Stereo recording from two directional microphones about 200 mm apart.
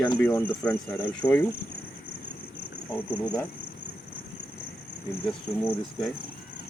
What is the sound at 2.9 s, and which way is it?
Speech, 5° left (ahead or behind).